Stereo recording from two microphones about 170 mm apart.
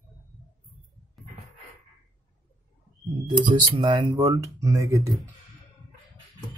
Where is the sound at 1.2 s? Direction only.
Centre (ahead or behind).